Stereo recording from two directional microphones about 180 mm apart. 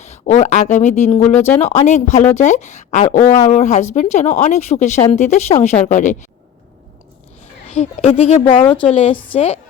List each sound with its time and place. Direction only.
0.0 s a woman's voice: 40° left (ahead or behind)
7.7 s a woman's voice: 35° left (ahead or behind)